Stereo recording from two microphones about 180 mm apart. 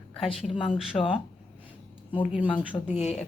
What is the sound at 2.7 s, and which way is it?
Speech, 20° left (ahead or behind).